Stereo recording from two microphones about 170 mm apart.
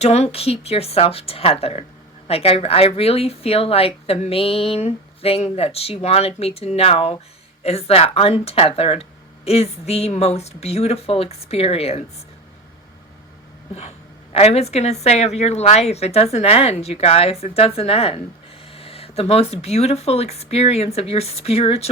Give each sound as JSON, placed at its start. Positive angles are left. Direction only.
{"t": 0.0, "sound": "speech", "side_deg": 40}
{"t": 14.3, "sound": "speech", "side_deg": 40}